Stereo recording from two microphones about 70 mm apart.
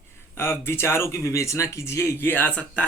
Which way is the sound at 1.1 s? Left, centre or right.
Left.